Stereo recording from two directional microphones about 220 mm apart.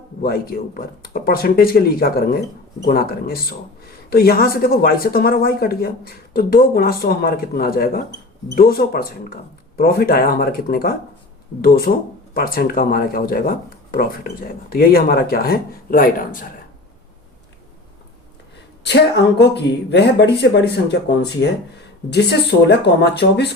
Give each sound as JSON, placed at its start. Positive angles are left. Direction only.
{"t": 0.2, "sound": "speech", "side_deg": 45}
{"t": 18.9, "sound": "speech", "side_deg": 50}
{"t": 22.1, "sound": "speech", "side_deg": 50}